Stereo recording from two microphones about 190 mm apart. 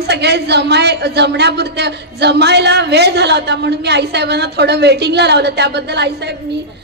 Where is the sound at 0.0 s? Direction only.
60° right (ahead or behind).